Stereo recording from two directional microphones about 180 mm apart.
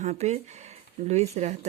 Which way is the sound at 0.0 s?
40° right (ahead or behind).